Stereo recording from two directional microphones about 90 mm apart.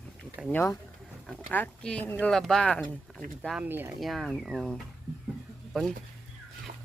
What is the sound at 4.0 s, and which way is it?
Speech, centre (ahead or behind).